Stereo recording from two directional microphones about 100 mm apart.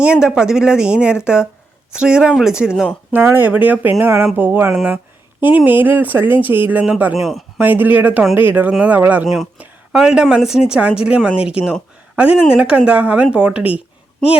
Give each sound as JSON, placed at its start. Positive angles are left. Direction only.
{"t": 0.0, "sound": "speech", "side_deg": -10}
{"t": 3.1, "sound": "speech", "side_deg": -20}
{"t": 7.2, "sound": "speech", "side_deg": 0}
{"t": 7.6, "sound": "speech", "side_deg": -20}
{"t": 9.2, "sound": "speech", "side_deg": 0}